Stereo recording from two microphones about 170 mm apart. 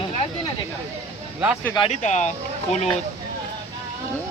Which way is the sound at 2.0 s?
45° left (ahead or behind).